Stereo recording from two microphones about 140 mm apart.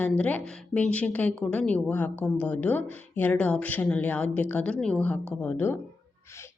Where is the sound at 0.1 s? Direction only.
10° left (ahead or behind).